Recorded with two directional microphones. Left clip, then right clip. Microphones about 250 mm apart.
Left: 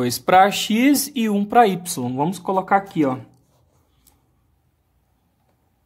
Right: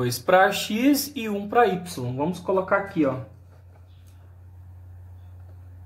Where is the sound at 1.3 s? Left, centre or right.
Left.